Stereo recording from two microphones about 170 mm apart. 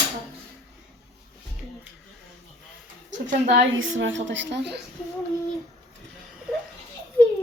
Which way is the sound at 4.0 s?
90° right.